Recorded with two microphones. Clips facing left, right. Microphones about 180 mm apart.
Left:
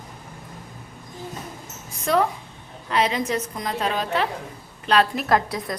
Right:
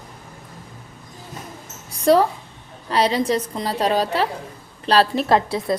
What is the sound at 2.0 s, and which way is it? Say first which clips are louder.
A woman's voice: right 6 dB; 35° right (ahead or behind).